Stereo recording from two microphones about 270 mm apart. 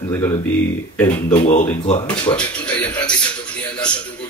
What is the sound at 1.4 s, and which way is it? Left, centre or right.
Speech, left.